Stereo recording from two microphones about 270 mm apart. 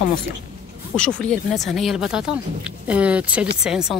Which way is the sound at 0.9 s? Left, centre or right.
Centre.